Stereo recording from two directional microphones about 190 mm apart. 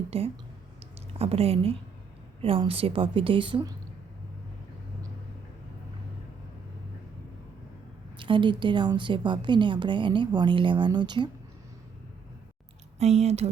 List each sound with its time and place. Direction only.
0.1 s speech: 30° right (ahead or behind)
0.8 s a sound: 30° right (ahead or behind)
2.4 s a woman's voice: 30° right (ahead or behind)
8.2 s a woman's voice: 25° right (ahead or behind)
13.0 s speech: 35° right (ahead or behind)